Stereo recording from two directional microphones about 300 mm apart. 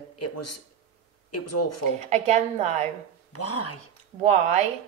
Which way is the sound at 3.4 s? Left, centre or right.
Left.